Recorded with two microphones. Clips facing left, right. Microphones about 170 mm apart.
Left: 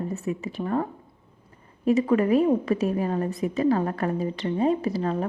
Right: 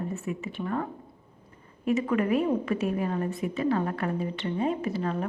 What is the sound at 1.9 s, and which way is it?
A woman's voice, 35° left (ahead or behind).